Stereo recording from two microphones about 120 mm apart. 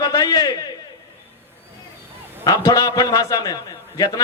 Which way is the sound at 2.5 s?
30° left (ahead or behind).